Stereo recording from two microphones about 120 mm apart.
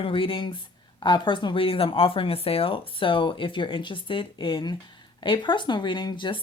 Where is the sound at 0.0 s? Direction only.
50° left (ahead or behind).